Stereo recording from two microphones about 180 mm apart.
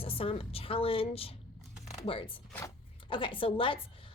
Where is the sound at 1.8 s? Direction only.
35° left (ahead or behind).